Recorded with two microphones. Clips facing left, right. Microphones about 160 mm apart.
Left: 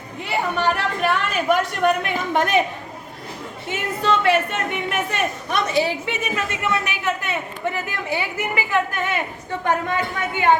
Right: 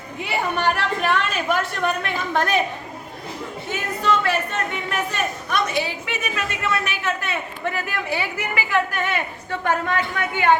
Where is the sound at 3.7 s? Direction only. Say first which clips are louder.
Left 1 dB; 25° left (ahead or behind).